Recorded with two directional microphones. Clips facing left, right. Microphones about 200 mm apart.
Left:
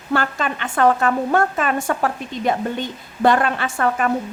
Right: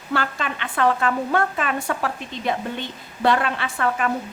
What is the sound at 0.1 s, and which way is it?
A woman's voice, 50° left (ahead or behind).